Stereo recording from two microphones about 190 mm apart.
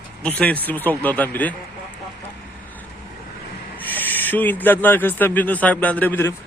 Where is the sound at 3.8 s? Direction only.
10° left (ahead or behind).